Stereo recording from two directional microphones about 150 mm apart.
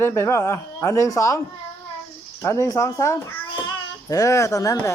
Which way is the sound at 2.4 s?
20° left (ahead or behind).